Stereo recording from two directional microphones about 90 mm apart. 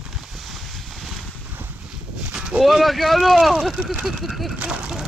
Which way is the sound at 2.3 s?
5° right (ahead or behind).